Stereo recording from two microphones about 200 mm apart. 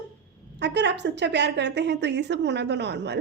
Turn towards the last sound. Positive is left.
turn(degrees=-60)  # may be behind; listen again after turning